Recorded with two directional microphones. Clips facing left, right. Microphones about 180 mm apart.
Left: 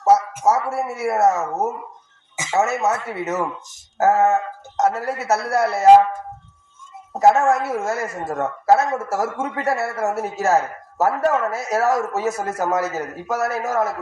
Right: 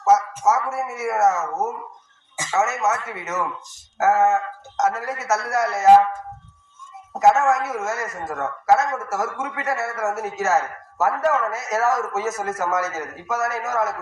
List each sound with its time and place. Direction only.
0.0 s a man's voice: 30° left (ahead or behind)
3.9 s music: 35° left (ahead or behind)
4.3 s a man's voice: 30° left (ahead or behind)
7.2 s a man's voice: 30° left (ahead or behind)